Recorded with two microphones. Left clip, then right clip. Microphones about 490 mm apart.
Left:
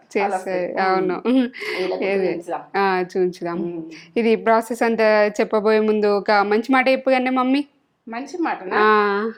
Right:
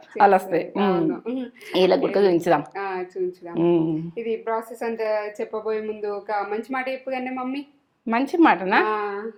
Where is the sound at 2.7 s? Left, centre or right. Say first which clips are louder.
Left 9 dB; left.